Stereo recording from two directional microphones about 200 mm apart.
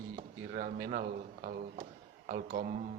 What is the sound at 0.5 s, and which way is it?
A man's voice, 45° right (ahead or behind).